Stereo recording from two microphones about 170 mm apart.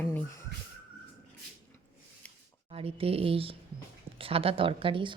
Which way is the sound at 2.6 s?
35° right (ahead or behind).